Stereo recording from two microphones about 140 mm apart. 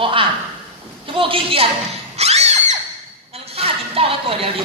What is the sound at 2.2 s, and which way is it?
Screaming, 50° right (ahead or behind).